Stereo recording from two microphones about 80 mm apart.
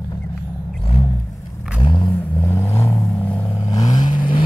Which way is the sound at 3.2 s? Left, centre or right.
Left.